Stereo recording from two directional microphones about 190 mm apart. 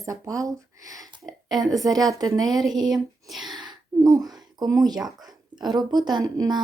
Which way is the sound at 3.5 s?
20° right (ahead or behind).